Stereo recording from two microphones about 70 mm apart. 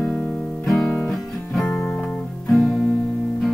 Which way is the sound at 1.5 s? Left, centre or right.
Centre.